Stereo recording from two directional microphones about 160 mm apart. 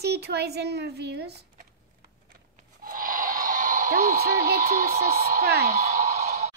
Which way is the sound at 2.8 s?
60° right (ahead or behind).